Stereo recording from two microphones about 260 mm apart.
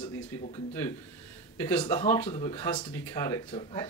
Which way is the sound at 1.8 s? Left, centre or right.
Centre.